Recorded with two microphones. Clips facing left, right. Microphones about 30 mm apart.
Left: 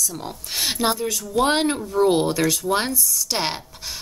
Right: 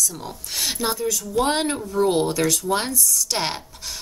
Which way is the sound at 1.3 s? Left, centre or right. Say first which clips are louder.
Left 3 dB; centre.